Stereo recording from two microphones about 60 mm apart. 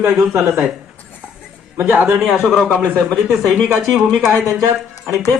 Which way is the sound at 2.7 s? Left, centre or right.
Left.